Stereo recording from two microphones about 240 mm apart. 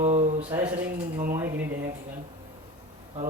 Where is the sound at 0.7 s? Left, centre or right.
Right.